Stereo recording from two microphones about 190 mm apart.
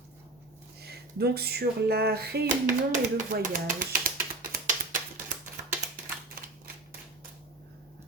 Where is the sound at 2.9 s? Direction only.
45° right (ahead or behind).